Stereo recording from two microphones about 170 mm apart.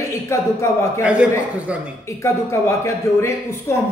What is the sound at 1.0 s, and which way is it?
Speech, 5° right (ahead or behind).